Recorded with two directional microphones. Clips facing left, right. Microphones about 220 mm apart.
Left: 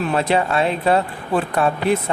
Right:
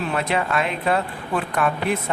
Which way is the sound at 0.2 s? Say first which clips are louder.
Left 5 dB; 30° left (ahead or behind).